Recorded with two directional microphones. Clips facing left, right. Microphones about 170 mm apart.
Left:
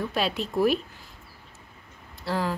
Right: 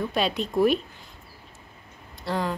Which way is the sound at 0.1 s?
5° left (ahead or behind).